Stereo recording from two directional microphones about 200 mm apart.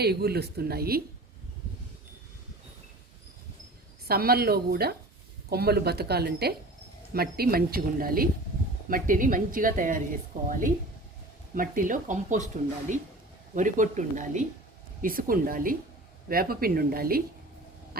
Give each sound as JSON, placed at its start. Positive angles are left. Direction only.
{"t": 0.0, "sound": "a woman's voice", "side_deg": -55}
{"t": 4.0, "sound": "a woman's voice", "side_deg": -50}